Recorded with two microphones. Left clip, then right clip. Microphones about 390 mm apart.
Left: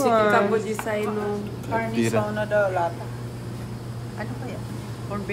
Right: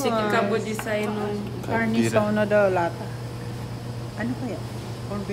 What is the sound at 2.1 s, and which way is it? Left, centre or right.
Speech, centre.